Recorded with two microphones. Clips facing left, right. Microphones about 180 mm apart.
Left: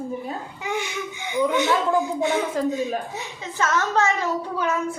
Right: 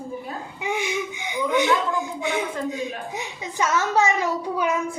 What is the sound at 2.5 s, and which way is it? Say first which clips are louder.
Speech: left 5 dB; 40° left (ahead or behind).